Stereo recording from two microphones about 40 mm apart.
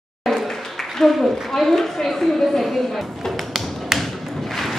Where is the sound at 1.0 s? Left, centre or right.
Centre.